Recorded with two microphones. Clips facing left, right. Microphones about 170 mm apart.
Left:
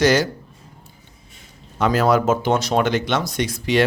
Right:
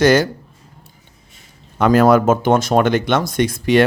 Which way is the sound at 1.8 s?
50° right (ahead or behind).